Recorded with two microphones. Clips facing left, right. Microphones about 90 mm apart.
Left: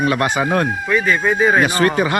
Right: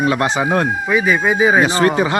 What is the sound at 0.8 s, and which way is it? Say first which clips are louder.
Speech: right 2 dB; 10° right (ahead or behind).